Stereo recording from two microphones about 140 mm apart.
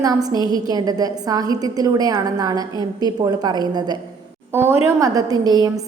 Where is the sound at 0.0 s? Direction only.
25° right (ahead or behind).